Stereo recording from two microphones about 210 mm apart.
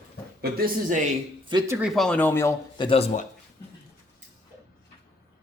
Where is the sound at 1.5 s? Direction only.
15° right (ahead or behind).